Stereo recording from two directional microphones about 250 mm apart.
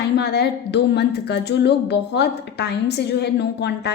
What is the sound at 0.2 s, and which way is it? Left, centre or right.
A woman's voice, left.